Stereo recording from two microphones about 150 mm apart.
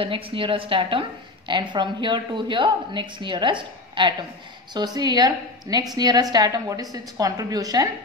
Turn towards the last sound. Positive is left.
turn(degrees=-25)  # may be behind; listen again after turning